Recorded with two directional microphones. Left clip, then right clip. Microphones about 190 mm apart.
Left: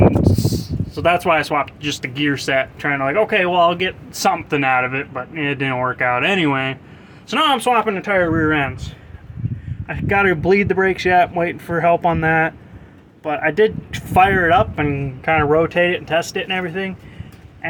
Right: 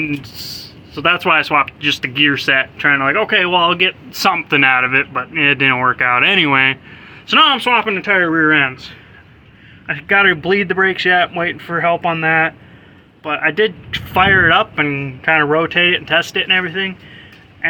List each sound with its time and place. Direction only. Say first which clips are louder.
0.2 s a man's voice: left 9 dB; 10° left (ahead or behind)
7.5 s speech: right 2 dB; 15° left (ahead or behind)